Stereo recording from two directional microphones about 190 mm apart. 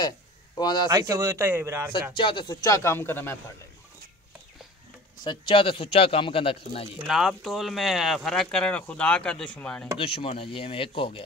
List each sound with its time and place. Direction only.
0.6 s speech: 20° left (ahead or behind)
0.8 s speech: 20° right (ahead or behind)
2.1 s speech: 25° left (ahead or behind)
5.2 s speech: 25° left (ahead or behind)
7.1 s speech: centre (ahead or behind)
9.9 s speech: 30° left (ahead or behind)